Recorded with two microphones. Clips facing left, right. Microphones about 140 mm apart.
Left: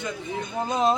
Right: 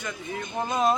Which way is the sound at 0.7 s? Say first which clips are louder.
Left 1 dB; 25° left (ahead or behind).